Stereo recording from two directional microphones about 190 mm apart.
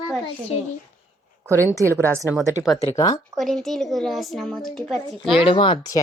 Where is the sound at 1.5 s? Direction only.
15° right (ahead or behind).